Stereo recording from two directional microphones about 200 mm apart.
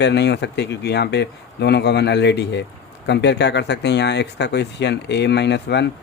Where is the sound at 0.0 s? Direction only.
60° left (ahead or behind).